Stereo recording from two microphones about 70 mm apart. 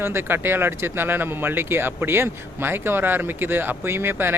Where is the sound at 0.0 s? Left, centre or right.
Right.